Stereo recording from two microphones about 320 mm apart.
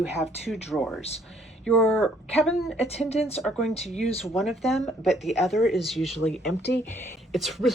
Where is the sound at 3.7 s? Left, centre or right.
Centre.